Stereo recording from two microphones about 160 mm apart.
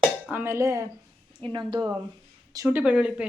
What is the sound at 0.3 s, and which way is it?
Speech, 15° right (ahead or behind).